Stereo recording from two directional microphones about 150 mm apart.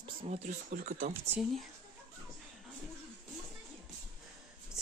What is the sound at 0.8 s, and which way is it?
Speech, 70° right (ahead or behind).